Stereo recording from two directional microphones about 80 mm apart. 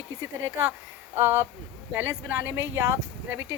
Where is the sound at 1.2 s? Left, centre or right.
Right.